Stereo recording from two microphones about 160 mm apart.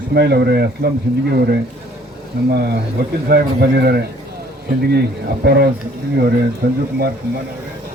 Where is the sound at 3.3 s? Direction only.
80° right.